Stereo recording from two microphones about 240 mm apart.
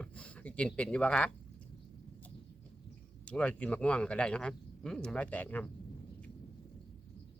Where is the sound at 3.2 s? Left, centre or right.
Centre.